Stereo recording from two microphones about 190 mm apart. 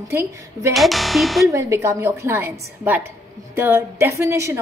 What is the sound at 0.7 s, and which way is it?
Speech, centre (ahead or behind).